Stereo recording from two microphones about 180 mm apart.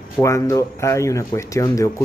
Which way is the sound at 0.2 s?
15° left (ahead or behind).